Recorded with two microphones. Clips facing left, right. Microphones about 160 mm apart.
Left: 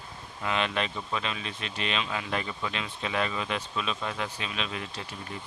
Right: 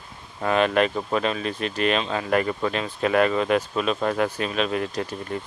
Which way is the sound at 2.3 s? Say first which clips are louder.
Right 10 dB; 55° right (ahead or behind).